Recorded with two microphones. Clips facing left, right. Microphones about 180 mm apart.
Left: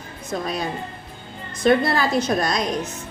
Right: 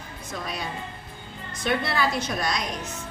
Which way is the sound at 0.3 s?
45° left (ahead or behind).